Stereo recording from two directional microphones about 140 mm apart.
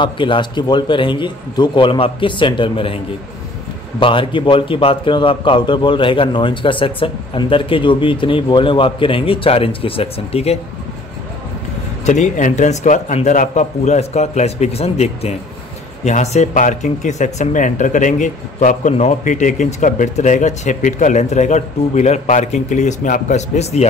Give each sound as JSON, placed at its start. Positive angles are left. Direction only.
{"t": 0.0, "sound": "a man's voice", "side_deg": 35}
{"t": 4.0, "sound": "a man's voice", "side_deg": 40}
{"t": 12.1, "sound": "speech", "side_deg": 65}